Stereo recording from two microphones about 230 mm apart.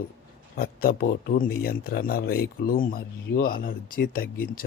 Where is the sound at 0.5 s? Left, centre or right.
Left.